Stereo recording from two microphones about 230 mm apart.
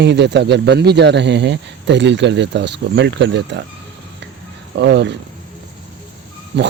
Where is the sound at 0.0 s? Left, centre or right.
Right.